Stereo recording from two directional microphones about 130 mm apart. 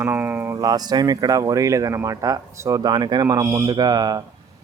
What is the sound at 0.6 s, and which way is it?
Speech, 30° right (ahead or behind).